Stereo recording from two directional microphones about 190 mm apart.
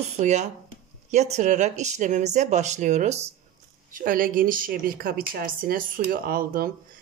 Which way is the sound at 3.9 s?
45° right (ahead or behind).